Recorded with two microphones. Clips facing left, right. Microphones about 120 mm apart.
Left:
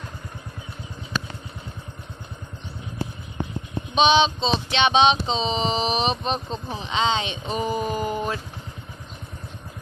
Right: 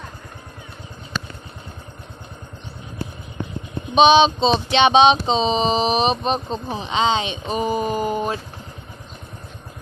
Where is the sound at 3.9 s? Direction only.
15° right (ahead or behind).